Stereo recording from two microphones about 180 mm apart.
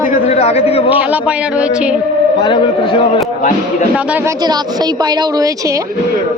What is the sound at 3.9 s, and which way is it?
A woman's voice, 5° right (ahead or behind).